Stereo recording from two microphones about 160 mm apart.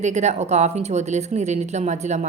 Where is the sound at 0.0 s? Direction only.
50° right (ahead or behind).